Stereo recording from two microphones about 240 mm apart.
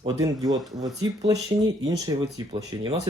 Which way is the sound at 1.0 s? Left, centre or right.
Centre.